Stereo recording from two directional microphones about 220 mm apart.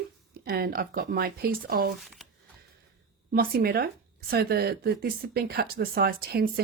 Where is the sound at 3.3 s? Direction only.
45° right (ahead or behind).